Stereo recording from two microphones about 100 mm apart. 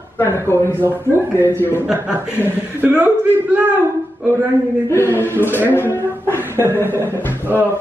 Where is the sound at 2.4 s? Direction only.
20° right (ahead or behind).